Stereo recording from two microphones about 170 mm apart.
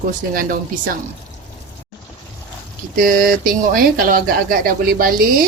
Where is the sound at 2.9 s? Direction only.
55° right (ahead or behind).